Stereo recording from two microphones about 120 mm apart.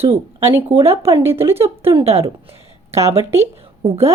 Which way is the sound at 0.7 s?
55° right (ahead or behind).